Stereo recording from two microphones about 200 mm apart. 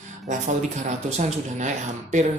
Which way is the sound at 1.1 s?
35° right (ahead or behind).